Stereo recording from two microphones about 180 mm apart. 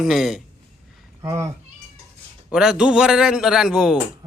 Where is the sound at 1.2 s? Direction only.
15° right (ahead or behind).